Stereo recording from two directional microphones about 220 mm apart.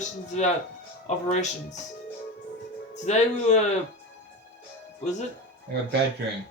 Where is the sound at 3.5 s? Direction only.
30° left (ahead or behind).